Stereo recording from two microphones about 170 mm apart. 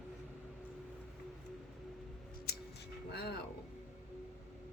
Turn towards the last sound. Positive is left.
turn(degrees=70)  # may be behind; listen again after turning